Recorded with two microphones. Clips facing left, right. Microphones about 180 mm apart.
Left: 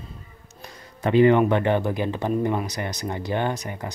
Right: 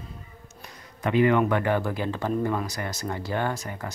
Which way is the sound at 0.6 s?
30° left (ahead or behind).